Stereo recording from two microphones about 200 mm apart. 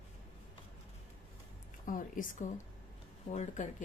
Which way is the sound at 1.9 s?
40° left (ahead or behind).